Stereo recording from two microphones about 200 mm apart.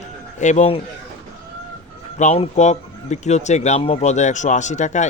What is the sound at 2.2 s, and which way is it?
Speech, 35° left (ahead or behind).